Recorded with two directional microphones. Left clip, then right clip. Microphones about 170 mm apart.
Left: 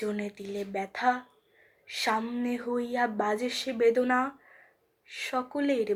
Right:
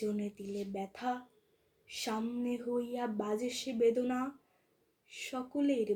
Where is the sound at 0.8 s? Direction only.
10° right (ahead or behind).